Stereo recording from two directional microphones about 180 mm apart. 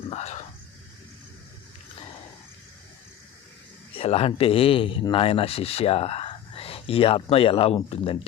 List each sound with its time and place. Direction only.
0.1 s speech: 40° left (ahead or behind)
3.9 s speech: 35° left (ahead or behind)